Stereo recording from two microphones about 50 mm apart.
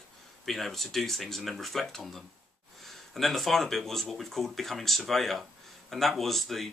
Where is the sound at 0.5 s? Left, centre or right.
Centre.